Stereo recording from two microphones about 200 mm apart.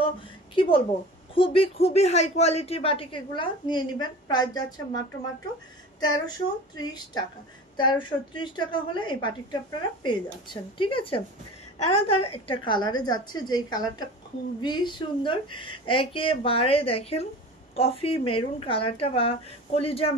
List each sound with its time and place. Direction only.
0.6 s a woman's voice: 25° left (ahead or behind)
5.9 s a woman's voice: 20° left (ahead or behind)